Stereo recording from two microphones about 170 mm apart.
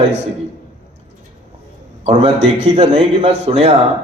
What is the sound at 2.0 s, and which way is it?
A man's voice, 35° right (ahead or behind).